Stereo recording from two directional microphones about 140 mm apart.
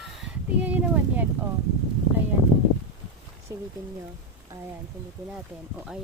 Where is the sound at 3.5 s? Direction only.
20° right (ahead or behind).